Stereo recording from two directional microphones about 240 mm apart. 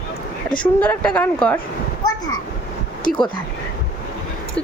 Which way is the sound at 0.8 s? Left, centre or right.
Centre.